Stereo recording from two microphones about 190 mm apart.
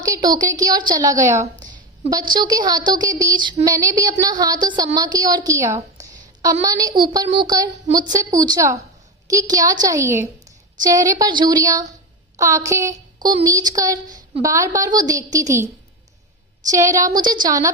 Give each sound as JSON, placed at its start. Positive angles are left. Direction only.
{"t": 0.0, "sound": "speech", "side_deg": -20}
{"t": 1.5, "sound": "a sound", "side_deg": -40}
{"t": 2.0, "sound": "a woman's voice", "side_deg": -20}
{"t": 16.7, "sound": "speech", "side_deg": -15}